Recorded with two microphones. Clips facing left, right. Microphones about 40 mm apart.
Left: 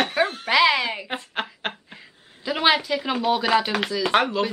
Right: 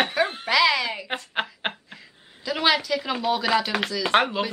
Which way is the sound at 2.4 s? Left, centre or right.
Centre.